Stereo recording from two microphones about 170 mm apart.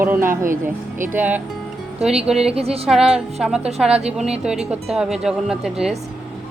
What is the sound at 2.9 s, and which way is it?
Speech, 5° right (ahead or behind).